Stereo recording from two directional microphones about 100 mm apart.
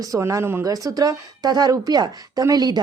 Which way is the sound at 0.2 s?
30° right (ahead or behind).